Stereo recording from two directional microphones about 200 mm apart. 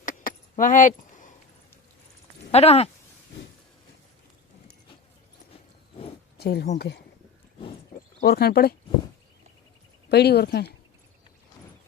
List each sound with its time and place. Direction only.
0.0 s a sound: 45° left (ahead or behind)
2.5 s speech: 30° left (ahead or behind)
6.3 s a woman's voice: 55° left (ahead or behind)
10.1 s a woman's voice: 55° left (ahead or behind)